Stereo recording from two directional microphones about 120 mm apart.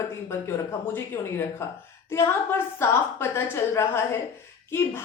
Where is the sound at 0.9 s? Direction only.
20° left (ahead or behind).